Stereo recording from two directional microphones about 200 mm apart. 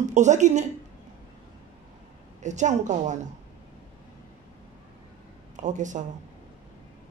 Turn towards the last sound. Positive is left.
turn(degrees=-40)  # may be behind; listen again after turning